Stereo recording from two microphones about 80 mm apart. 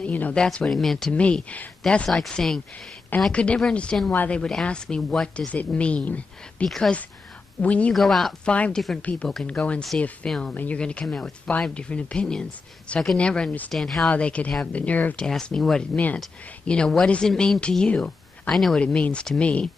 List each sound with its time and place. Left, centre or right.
0.0 s speech: centre
1.1 s speech: centre
4.1 s a woman's voice: left
4.4 s speech: centre
5.5 s speech: centre
7.9 s speech: centre
8.5 s speech: centre
13.7 s speech: centre
14.1 s speech: centre
15.1 s speech: centre
18.5 s speech: centre
18.8 s speech: centre